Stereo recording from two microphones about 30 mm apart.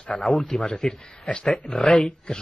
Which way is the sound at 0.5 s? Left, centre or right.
Centre.